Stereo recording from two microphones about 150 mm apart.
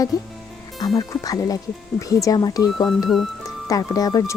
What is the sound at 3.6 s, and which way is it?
Speech, 25° left (ahead or behind).